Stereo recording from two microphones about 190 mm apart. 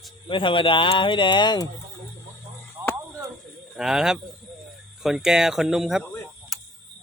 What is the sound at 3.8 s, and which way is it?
Speech, 5° right (ahead or behind).